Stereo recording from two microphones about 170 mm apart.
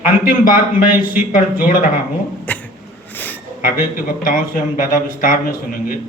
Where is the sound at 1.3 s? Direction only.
50° left (ahead or behind).